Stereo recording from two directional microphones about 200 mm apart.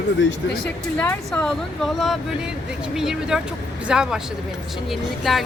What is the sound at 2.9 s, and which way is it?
Speech, centre (ahead or behind).